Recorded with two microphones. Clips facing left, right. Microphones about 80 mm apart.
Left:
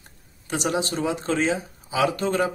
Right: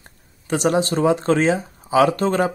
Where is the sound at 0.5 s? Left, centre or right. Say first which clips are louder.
Right 6 dB; right.